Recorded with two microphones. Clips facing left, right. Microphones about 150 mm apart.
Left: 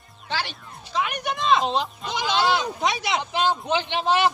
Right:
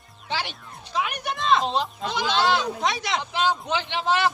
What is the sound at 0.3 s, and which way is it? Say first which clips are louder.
Music: even; 10° right (ahead or behind).